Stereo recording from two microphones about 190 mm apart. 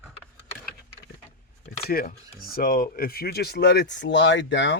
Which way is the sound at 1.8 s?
50° left (ahead or behind).